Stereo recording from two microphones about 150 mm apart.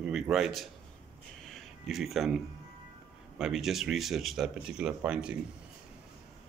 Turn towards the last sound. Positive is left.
turn(degrees=-5)  # may be behind; listen again after turning